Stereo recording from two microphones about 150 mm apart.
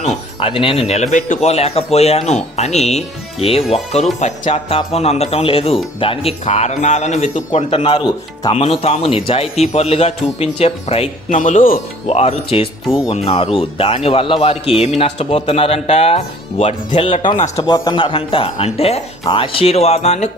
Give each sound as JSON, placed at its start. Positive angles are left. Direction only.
{"t": 0.3, "sound": "speech", "side_deg": 35}
{"t": 7.9, "sound": "speech", "side_deg": 30}
{"t": 8.5, "sound": "speech", "side_deg": 40}
{"t": 11.3, "sound": "speech", "side_deg": 60}
{"t": 12.0, "sound": "speech", "side_deg": 45}
{"t": 17.6, "sound": "speech", "side_deg": 25}